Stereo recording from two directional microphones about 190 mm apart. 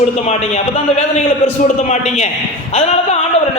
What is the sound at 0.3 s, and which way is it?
Speech, 35° left (ahead or behind).